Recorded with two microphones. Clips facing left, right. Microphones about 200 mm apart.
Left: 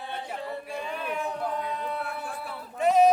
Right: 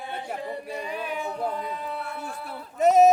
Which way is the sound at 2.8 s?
45° right (ahead or behind).